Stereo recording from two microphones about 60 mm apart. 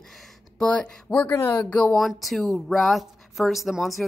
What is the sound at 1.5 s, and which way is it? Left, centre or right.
Speech, left.